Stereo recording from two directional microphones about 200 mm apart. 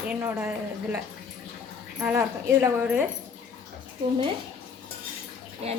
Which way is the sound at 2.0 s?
10° right (ahead or behind).